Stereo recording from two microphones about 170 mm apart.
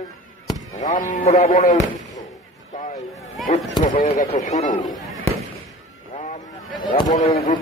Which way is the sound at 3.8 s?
50° left (ahead or behind).